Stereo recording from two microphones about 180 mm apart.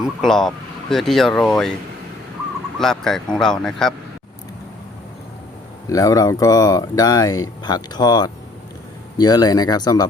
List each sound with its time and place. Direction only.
0.0 s speech: centre (ahead or behind)
2.7 s speech: 5° left (ahead or behind)
5.9 s speech: 20° left (ahead or behind)